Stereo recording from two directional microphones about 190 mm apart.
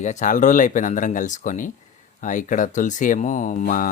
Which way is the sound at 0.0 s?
40° left (ahead or behind).